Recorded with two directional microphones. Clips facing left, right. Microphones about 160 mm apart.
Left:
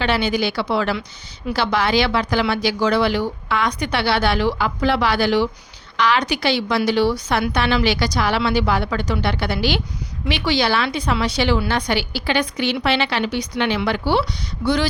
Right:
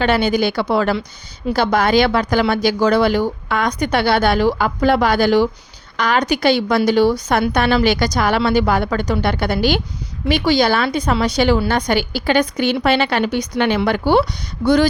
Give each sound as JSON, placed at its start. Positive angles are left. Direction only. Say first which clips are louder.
{"t": 0.0, "sound": "speech", "louder": "right 4 dB", "side_deg": -45}